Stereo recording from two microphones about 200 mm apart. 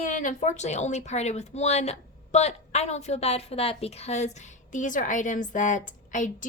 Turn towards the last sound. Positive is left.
turn(degrees=40)  # may be behind; listen again after turning